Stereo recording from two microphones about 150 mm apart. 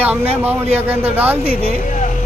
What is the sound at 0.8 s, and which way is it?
Speech, 10° right (ahead or behind).